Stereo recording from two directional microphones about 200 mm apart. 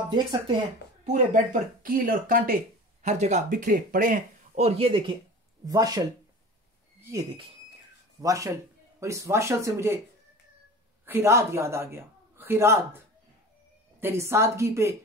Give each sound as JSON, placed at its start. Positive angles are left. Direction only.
{"t": 0.1, "sound": "speech", "side_deg": -25}
{"t": 1.0, "sound": "a woman's voice", "side_deg": -40}
{"t": 8.2, "sound": "a woman's voice", "side_deg": -15}
{"t": 11.1, "sound": "a man's voice", "side_deg": -10}